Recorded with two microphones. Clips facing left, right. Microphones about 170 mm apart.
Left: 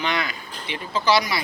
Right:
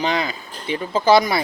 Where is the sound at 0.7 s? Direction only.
50° right (ahead or behind).